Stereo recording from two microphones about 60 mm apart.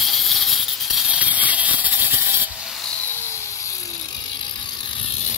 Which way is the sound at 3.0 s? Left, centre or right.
Left.